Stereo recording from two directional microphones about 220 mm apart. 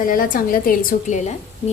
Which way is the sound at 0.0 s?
40° left (ahead or behind).